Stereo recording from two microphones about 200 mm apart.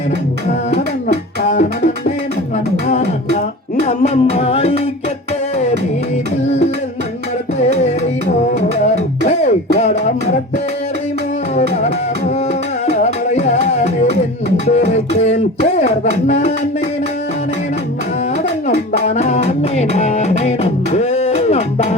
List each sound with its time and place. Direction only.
2.8 s beatboxing: 35° left (ahead or behind)
3.8 s music: 35° left (ahead or behind)
7.6 s music: 35° left (ahead or behind)
9.2 s music: 35° left (ahead or behind)
12.9 s music: 35° left (ahead or behind)
18.7 s music: 35° left (ahead or behind)